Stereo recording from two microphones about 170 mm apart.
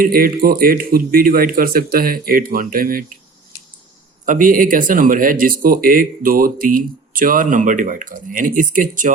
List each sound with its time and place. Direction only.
0.0 s speech: 60° right (ahead or behind)
4.3 s speech: 50° right (ahead or behind)